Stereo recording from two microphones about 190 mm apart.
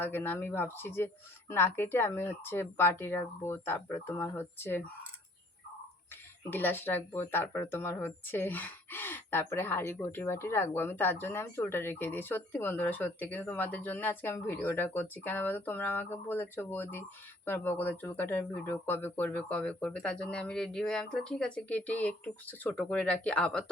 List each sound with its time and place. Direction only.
0.0 s speech: 10° left (ahead or behind)
6.5 s speech: 10° left (ahead or behind)